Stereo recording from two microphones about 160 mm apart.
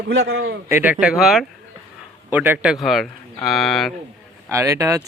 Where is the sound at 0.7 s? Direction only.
10° right (ahead or behind).